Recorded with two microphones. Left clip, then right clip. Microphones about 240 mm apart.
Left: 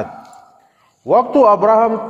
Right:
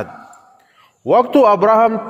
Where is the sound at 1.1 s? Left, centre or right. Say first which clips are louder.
Even; right.